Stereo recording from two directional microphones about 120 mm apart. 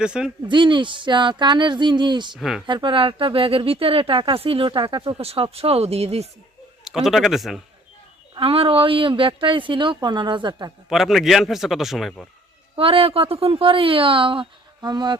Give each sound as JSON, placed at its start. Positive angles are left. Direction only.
{"t": 0.0, "sound": "speech", "side_deg": -5}
{"t": 0.4, "sound": "speech", "side_deg": -40}
{"t": 2.4, "sound": "a man's voice", "side_deg": 0}
{"t": 2.6, "sound": "speech", "side_deg": -45}
{"t": 6.8, "sound": "a man's voice", "side_deg": -5}
{"t": 8.4, "sound": "speech", "side_deg": -50}
{"t": 10.8, "sound": "a man's voice", "side_deg": -5}
{"t": 12.7, "sound": "speech", "side_deg": -50}